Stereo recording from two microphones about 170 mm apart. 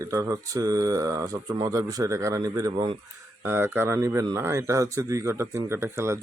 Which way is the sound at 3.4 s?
15° right (ahead or behind).